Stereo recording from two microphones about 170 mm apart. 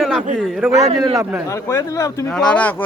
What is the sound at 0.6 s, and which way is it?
Speech, 10° right (ahead or behind).